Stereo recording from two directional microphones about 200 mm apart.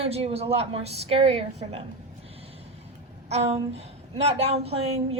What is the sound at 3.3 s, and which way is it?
A woman's voice, 30° right (ahead or behind).